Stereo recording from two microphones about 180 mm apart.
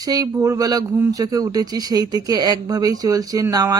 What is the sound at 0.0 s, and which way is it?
Speech, 20° right (ahead or behind).